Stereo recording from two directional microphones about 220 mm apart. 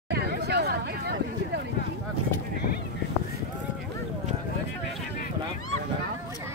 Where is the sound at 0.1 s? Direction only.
50° right (ahead or behind).